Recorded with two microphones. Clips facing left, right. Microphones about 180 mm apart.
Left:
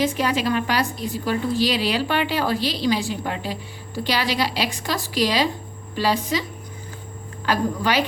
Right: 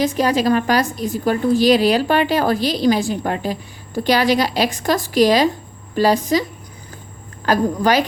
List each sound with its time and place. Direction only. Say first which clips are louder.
0.0 s a woman's voice: right 5 dB; 40° right (ahead or behind)
7.4 s a woman's voice: right 5 dB; 45° right (ahead or behind)